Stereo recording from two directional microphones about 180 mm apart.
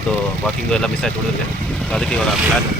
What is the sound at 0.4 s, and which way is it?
Speech, 5° left (ahead or behind).